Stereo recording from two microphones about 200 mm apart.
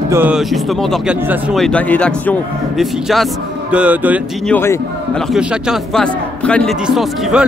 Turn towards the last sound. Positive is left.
turn(degrees=0)  # may be behind; listen again after turning